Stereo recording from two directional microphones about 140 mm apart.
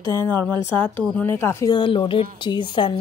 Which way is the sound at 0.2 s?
15° left (ahead or behind).